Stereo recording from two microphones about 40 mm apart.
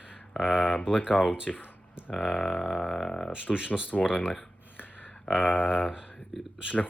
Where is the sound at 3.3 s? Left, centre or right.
Right.